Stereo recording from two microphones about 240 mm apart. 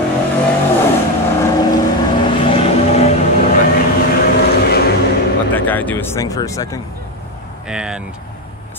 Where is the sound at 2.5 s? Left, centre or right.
Left.